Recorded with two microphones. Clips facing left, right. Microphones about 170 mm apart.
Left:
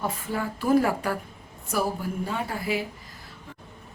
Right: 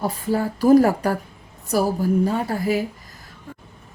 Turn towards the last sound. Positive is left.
turn(degrees=-40)  # may be behind; listen again after turning